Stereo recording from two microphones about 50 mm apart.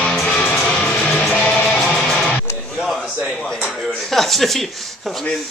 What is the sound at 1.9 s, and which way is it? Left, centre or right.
Music, centre.